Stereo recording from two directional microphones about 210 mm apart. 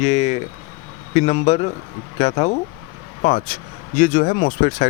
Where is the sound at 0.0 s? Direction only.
30° left (ahead or behind).